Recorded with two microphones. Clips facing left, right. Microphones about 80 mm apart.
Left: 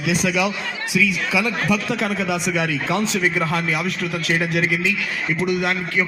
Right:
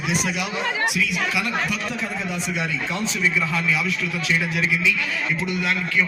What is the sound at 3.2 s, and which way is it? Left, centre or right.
A man's voice, left.